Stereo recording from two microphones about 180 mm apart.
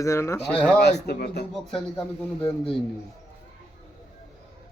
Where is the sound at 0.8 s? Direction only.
65° left (ahead or behind).